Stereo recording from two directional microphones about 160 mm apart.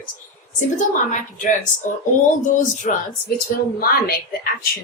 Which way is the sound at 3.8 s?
75° left (ahead or behind).